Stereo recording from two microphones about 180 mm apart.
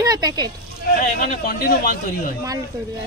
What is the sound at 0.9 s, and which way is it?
A man's voice, 50° left (ahead or behind).